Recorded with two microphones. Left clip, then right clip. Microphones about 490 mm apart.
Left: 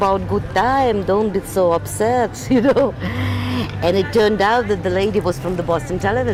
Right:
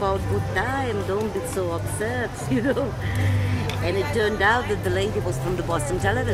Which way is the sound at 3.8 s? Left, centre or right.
Left.